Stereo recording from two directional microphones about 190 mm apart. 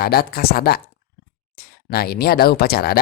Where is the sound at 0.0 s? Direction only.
55° left (ahead or behind).